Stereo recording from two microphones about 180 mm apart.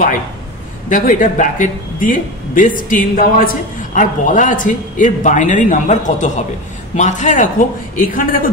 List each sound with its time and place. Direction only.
0.8 s a man's voice: 45° left (ahead or behind)